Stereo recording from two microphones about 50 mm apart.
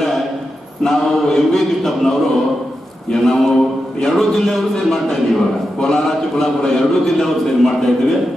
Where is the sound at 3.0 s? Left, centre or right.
Centre.